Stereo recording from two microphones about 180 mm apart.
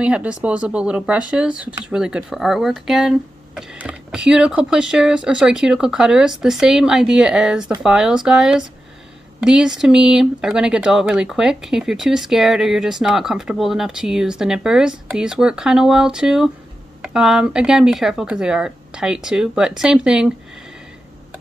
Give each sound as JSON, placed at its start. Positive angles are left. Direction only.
{"t": 0.0, "sound": "speech", "side_deg": -5}